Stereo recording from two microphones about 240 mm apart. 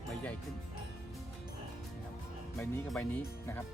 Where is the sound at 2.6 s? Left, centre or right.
Centre.